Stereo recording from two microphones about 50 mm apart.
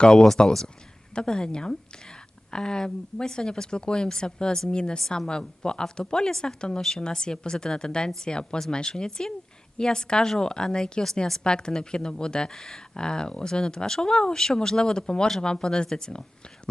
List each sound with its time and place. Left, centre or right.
0.0 s a woman's voice: centre